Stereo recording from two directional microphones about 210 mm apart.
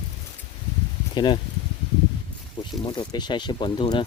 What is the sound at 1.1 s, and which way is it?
Speech, 20° left (ahead or behind).